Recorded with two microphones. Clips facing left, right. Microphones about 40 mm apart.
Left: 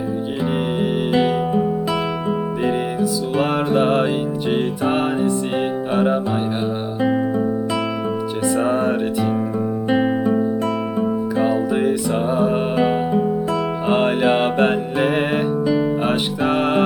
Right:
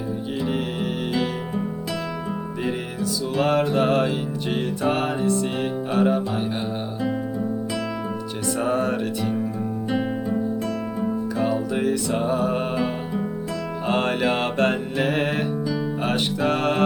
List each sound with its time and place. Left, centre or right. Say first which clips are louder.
1.1 s music: left 8 dB; left
2.6 s music: left 6 dB; centre
8.4 s music: left 4 dB; left
9.9 s music: left 8 dB; left
11.4 s music: left 4 dB; centre
12.7 s music: left 8 dB; left
13.8 s music: left 4 dB; centre
15.6 s music: left 8 dB; left
16.0 s music: left 3 dB; centre